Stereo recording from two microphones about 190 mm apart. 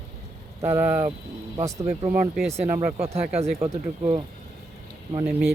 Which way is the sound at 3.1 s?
35° right (ahead or behind).